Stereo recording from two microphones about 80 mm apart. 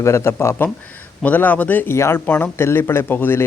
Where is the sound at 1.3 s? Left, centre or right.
Left.